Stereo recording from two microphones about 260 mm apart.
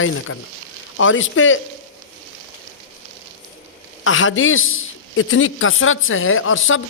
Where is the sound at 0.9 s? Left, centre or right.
Left.